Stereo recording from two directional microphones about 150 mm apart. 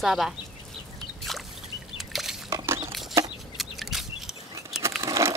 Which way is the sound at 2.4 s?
20° right (ahead or behind).